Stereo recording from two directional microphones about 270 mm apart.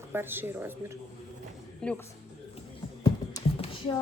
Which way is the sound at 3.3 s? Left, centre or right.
Centre.